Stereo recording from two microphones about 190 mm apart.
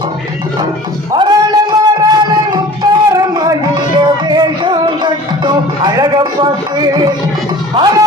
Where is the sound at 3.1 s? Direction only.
20° right (ahead or behind).